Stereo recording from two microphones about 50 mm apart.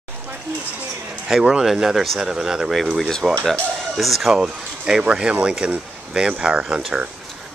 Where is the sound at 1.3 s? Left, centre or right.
Centre.